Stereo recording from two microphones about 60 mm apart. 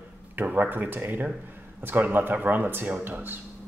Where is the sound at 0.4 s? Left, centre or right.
Right.